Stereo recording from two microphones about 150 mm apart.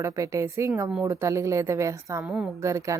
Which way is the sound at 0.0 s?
20° right (ahead or behind).